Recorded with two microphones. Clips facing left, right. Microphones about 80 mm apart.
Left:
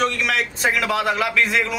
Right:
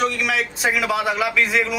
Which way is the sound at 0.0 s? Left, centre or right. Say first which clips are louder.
Even; centre.